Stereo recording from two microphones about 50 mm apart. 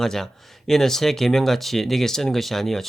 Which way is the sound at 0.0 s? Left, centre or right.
Centre.